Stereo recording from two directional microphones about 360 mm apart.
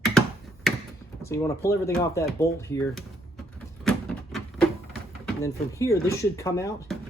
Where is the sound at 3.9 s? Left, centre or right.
Centre.